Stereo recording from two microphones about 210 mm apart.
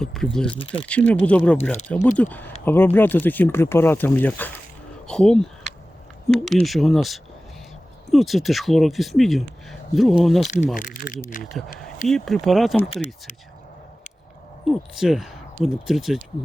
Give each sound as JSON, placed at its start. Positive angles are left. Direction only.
{"t": 0.0, "sound": "speech", "side_deg": 0}
{"t": 5.0, "sound": "a sound", "side_deg": 5}
{"t": 6.2, "sound": "speech", "side_deg": 0}
{"t": 10.8, "sound": "speech", "side_deg": 40}
{"t": 12.0, "sound": "speech", "side_deg": 0}
{"t": 14.7, "sound": "speech", "side_deg": 0}